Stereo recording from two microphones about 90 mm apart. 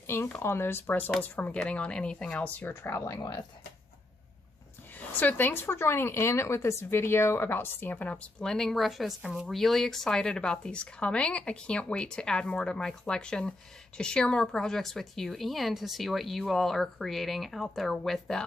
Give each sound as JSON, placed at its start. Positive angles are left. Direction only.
{"t": 0.0, "sound": "a sound", "side_deg": 30}
{"t": 0.4, "sound": "speech", "side_deg": 25}
{"t": 2.7, "sound": "speech", "side_deg": 30}
{"t": 3.2, "sound": "speech", "side_deg": 50}
{"t": 4.9, "sound": "speech", "side_deg": 20}